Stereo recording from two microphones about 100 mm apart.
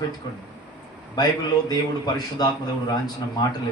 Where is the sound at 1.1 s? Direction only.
40° left (ahead or behind).